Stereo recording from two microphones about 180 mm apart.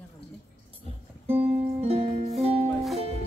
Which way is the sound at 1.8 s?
35° right (ahead or behind).